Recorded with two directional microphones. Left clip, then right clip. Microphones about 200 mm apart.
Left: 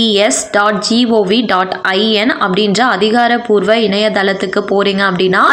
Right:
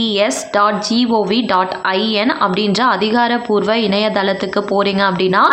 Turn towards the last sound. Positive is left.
turn(degrees=10)  # may be behind; listen again after turning